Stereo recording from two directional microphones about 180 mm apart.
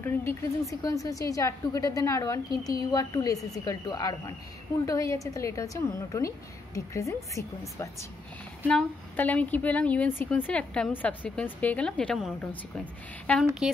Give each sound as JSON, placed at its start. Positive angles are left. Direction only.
{"t": 0.0, "sound": "a woman's voice", "side_deg": 15}